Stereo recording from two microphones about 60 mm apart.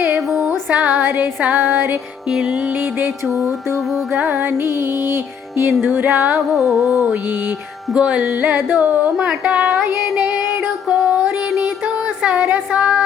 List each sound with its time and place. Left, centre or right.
0.7 s music: right
2.3 s speech: centre
3.2 s music: centre
4.2 s music: right
6.3 s music: centre
7.9 s speech: centre
8.2 s music: right
8.8 s speech: right
10.8 s music: centre
12.7 s speech: centre